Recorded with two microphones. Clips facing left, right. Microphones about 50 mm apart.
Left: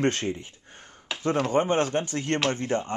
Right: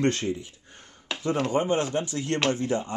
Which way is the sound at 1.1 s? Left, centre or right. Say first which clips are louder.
Right 1 dB; centre.